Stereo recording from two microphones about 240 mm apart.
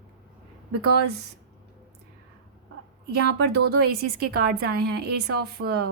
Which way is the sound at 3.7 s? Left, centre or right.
Right.